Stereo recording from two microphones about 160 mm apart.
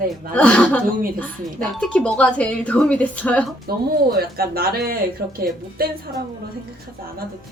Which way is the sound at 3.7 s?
75° right (ahead or behind).